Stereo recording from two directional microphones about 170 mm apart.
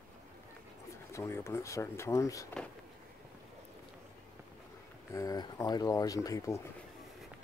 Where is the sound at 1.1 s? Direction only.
15° left (ahead or behind).